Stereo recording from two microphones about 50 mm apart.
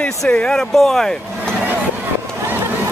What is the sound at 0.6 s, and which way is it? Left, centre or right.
Speech, centre.